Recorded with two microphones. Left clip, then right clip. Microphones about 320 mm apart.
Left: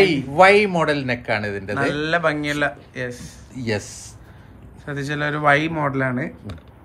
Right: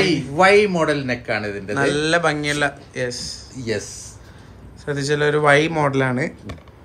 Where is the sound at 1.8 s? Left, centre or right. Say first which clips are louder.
Right 3 dB; centre.